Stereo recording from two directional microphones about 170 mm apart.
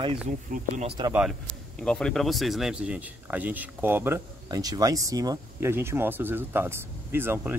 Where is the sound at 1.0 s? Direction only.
25° right (ahead or behind).